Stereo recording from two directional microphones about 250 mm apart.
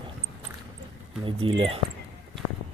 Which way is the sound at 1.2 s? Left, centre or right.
Right.